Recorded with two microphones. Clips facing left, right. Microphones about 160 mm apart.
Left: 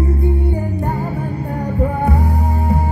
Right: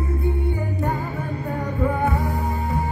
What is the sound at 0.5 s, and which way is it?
Music, 35° left (ahead or behind).